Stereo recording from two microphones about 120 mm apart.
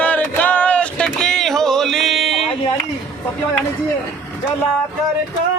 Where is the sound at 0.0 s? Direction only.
15° left (ahead or behind).